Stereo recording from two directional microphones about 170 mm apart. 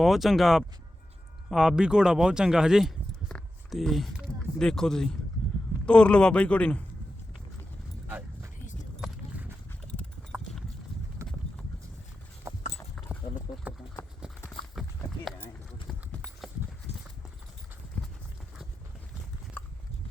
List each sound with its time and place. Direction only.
0.0 s a man's voice: centre (ahead or behind)
8.0 s dog: 10° right (ahead or behind)
9.0 s a sound: 10° right (ahead or behind)
10.3 s clip-clop: 5° right (ahead or behind)
11.2 s clip-clop: 20° right (ahead or behind)
13.0 s clip-clop: centre (ahead or behind)
14.8 s clip-clop: centre (ahead or behind)